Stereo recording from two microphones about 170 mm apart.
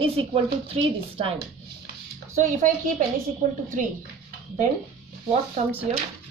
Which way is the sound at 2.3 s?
50° right (ahead or behind).